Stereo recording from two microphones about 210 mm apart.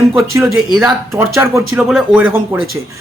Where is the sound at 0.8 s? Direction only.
10° right (ahead or behind).